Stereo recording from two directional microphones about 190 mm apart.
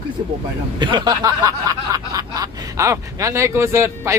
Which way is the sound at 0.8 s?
25° right (ahead or behind).